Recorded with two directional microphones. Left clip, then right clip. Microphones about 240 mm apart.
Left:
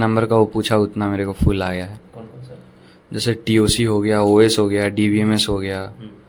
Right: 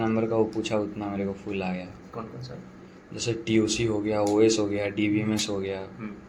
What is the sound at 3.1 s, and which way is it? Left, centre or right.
Speech, left.